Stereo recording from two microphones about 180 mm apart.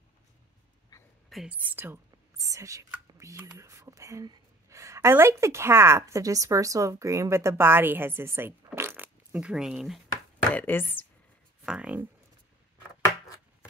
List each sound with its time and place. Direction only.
1.3 s speech: 5° right (ahead or behind)
10.5 s speech: 10° left (ahead or behind)
11.6 s speech: 5° right (ahead or behind)